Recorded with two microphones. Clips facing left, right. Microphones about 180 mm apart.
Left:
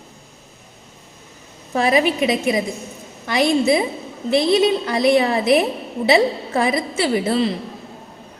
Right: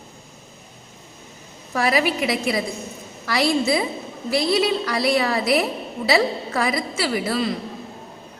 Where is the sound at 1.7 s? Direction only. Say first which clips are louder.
Left 4 dB; 25° left (ahead or behind).